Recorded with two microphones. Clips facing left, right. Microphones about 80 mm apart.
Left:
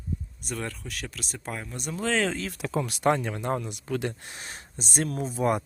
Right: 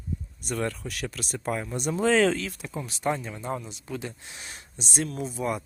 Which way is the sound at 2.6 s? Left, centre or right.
Left.